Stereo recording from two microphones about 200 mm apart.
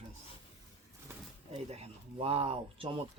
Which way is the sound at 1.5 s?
30° right (ahead or behind).